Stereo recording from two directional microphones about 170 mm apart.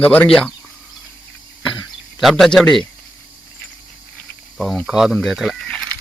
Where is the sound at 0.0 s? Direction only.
10° left (ahead or behind).